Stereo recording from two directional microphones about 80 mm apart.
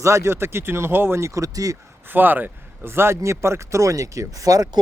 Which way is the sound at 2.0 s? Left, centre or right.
Right.